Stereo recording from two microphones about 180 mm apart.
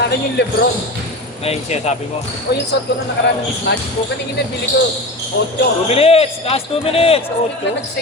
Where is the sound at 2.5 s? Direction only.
65° left (ahead or behind).